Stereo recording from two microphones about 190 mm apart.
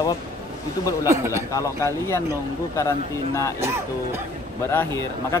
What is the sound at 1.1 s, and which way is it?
Speech, 15° right (ahead or behind).